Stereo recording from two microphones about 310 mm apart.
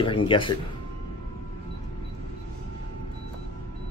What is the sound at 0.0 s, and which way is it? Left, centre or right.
Speech, centre.